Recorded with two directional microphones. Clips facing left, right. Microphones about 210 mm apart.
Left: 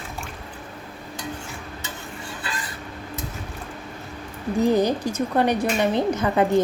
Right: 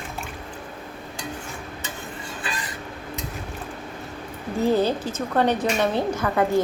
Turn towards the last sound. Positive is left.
turn(degrees=20)  # may be behind; listen again after turning